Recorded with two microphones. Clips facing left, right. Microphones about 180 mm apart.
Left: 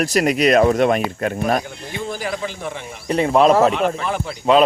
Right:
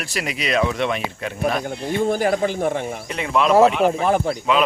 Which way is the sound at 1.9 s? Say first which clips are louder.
Right 7 dB; 50° right (ahead or behind).